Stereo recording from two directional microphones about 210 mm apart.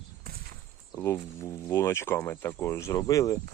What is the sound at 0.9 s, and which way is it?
Speech, 15° left (ahead or behind).